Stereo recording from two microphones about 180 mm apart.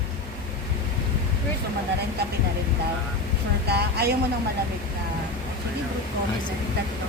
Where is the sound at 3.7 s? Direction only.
65° right (ahead or behind).